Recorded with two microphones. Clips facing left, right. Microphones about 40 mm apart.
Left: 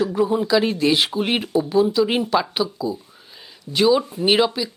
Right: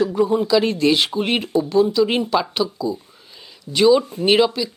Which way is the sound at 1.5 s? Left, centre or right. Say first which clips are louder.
Right 1 dB; centre.